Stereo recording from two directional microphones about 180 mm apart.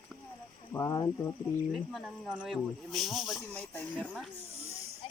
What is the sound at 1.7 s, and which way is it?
Speech, centre (ahead or behind).